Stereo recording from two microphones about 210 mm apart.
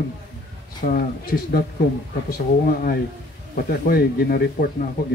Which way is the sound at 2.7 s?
40° left (ahead or behind).